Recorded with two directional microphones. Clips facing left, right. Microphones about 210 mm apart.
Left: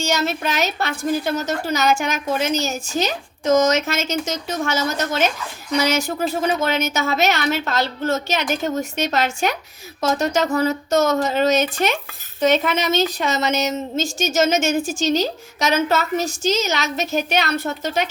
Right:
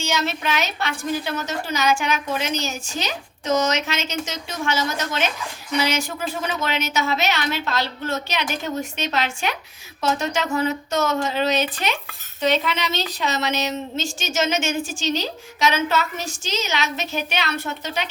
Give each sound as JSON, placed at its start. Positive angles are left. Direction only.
{"t": 0.1, "sound": "a woman's voice", "side_deg": 40}